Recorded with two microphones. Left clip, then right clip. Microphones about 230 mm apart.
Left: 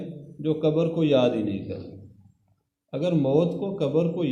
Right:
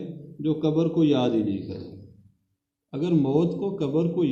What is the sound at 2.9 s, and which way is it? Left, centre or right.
A man's voice, left.